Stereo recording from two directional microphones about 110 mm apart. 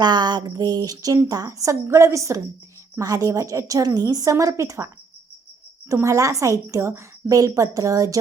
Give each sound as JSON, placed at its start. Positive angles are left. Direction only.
{"t": 0.0, "sound": "a woman's voice", "side_deg": -40}
{"t": 5.9, "sound": "a woman's voice", "side_deg": -25}